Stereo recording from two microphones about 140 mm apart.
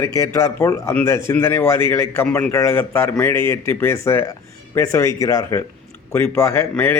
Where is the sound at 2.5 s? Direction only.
20° left (ahead or behind).